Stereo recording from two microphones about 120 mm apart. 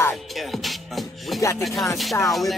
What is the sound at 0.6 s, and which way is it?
Music, centre (ahead or behind).